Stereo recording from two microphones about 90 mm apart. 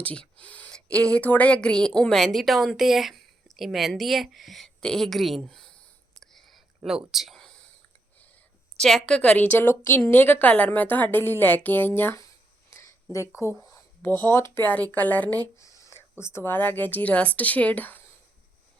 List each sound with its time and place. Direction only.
0.0 s speech: 15° left (ahead or behind)
8.8 s a woman's voice: 5° left (ahead or behind)
15.5 s speech: 35° left (ahead or behind); by 18.0 s 20° left (ahead or behind)